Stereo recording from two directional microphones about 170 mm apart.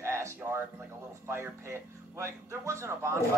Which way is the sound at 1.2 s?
15° right (ahead or behind).